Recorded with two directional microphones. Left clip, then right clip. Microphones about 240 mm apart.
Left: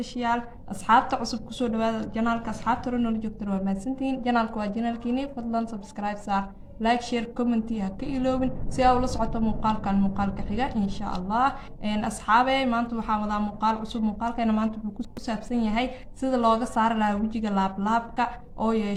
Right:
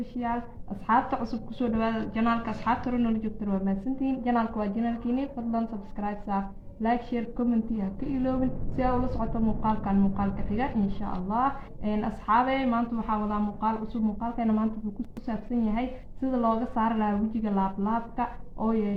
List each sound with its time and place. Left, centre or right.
0.9 s a woman's voice: left